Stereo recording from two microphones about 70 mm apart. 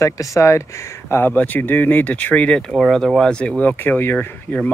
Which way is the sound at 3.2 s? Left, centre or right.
Centre.